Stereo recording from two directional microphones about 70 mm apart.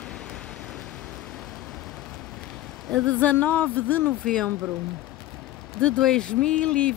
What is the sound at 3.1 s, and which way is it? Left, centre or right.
Speech, left.